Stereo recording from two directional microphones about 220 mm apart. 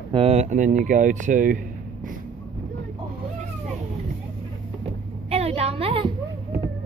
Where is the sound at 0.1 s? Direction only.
25° right (ahead or behind).